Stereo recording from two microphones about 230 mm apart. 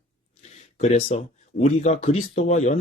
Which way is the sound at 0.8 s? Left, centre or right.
Left.